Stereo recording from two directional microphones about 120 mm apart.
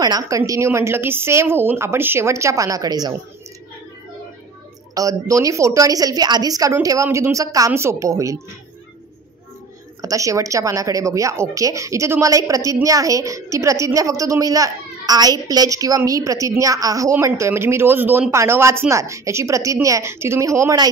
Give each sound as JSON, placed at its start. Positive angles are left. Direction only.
{"t": 0.0, "sound": "a woman's voice", "side_deg": -35}
{"t": 0.5, "sound": "a woman's voice", "side_deg": -25}
{"t": 4.9, "sound": "a woman's voice", "side_deg": -30}
{"t": 10.0, "sound": "a woman's voice", "side_deg": -25}